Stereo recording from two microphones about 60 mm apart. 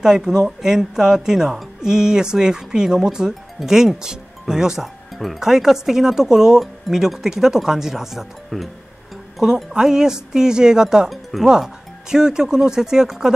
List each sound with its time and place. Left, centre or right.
0.0 s a woman's voice: centre